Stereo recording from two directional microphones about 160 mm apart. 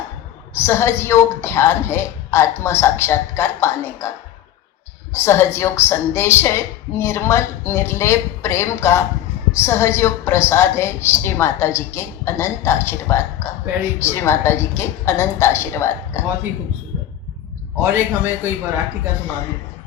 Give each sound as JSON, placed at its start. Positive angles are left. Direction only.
{"t": 0.5, "sound": "a woman's voice", "side_deg": 15}
{"t": 5.1, "sound": "a woman's voice", "side_deg": 15}
{"t": 17.8, "sound": "a man's voice", "side_deg": -15}